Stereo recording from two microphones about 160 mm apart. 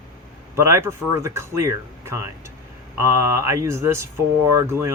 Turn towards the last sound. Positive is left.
turn(degrees=-20)  # may be behind; listen again after turning